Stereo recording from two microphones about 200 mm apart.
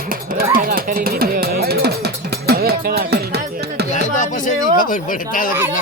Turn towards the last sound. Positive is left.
turn(degrees=40)  # may be behind; listen again after turning